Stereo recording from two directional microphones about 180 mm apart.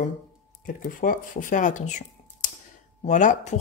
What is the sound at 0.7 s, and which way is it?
Speech, 50° left (ahead or behind).